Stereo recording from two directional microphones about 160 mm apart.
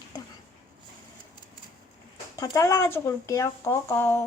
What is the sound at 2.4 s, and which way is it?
Speech, 20° left (ahead or behind).